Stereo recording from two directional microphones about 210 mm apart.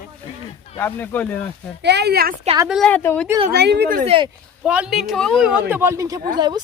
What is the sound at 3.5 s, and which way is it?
Speech, 55° right (ahead or behind).